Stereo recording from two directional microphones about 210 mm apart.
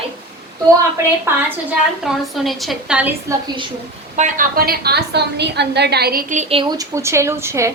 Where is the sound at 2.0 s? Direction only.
Centre (ahead or behind).